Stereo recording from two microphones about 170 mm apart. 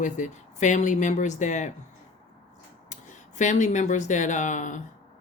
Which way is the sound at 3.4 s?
45° left (ahead or behind).